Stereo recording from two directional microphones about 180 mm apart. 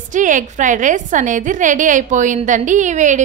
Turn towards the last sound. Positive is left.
turn(degrees=-45)  # may be behind; listen again after turning